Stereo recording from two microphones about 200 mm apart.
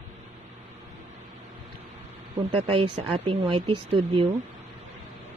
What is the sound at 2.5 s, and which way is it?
Speech, 25° right (ahead or behind).